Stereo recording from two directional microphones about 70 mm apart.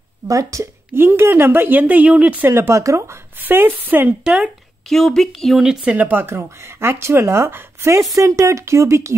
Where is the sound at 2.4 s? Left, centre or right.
Right.